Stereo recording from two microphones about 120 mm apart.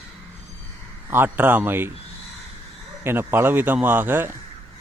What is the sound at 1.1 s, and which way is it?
Speech, 15° right (ahead or behind).